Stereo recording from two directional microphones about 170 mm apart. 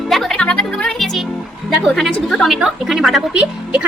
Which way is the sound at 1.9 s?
Centre (ahead or behind).